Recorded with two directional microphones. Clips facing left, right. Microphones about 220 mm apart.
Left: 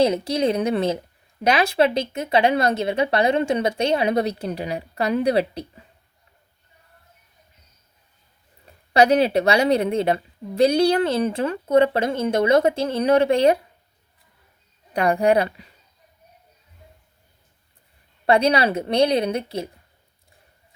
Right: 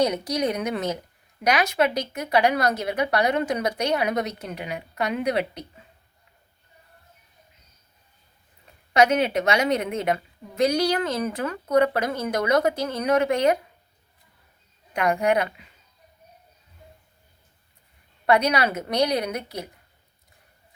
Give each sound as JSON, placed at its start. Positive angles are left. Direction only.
{"t": 0.0, "sound": "a woman's voice", "side_deg": 25}
{"t": 8.9, "sound": "a woman's voice", "side_deg": 35}
{"t": 14.9, "sound": "a woman's voice", "side_deg": 35}
{"t": 18.3, "sound": "a woman's voice", "side_deg": 30}